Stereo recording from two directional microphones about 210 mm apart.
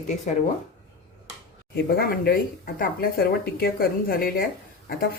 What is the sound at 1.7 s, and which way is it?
Speech, 45° left (ahead or behind).